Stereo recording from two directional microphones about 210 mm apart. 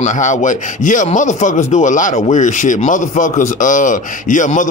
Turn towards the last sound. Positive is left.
turn(degrees=35)  # may be behind; listen again after turning